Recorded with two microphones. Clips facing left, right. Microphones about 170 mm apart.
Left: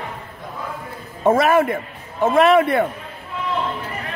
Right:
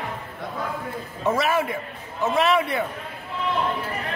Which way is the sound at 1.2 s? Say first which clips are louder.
Left 7 dB; 50° left (ahead or behind).